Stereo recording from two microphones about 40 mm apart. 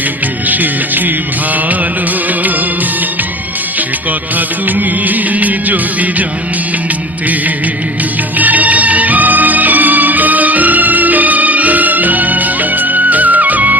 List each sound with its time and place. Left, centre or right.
0.4 s music: right
4.4 s music: right
8.4 s music: right